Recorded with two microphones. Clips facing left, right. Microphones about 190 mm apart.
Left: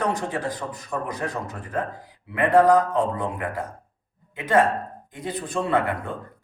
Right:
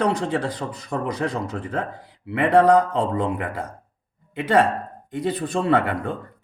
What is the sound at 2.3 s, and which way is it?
Speech, 70° right (ahead or behind).